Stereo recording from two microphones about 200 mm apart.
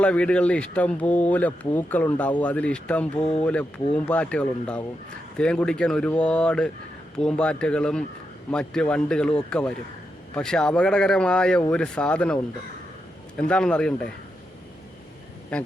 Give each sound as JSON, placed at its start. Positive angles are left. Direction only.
{"t": 0.0, "sound": "speech", "side_deg": 5}
{"t": 3.2, "sound": "speech", "side_deg": 25}
{"t": 3.4, "sound": "speech", "side_deg": 5}
{"t": 13.5, "sound": "speech", "side_deg": 5}